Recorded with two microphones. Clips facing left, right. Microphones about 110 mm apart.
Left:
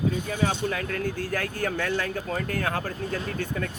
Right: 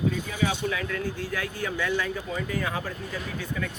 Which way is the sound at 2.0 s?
60° left (ahead or behind).